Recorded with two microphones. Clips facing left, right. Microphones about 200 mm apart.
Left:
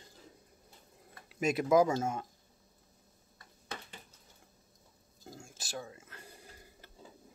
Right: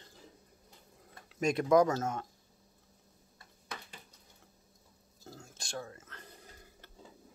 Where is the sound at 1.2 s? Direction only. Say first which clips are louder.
Right 1 dB; 5° left (ahead or behind).